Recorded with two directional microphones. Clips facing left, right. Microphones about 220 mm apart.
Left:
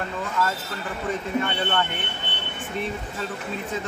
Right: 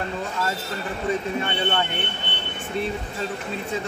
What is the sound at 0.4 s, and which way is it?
Speech, 25° right (ahead or behind).